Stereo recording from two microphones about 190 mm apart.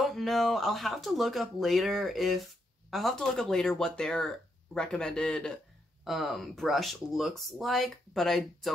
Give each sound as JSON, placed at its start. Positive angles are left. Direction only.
{"t": 0.0, "sound": "speech", "side_deg": 0}